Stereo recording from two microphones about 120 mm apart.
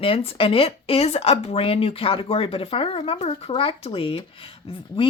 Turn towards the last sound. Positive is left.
turn(degrees=45)  # may be behind; listen again after turning